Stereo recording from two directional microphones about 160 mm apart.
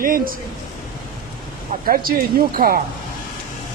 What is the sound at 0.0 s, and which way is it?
Speech, 60° right (ahead or behind).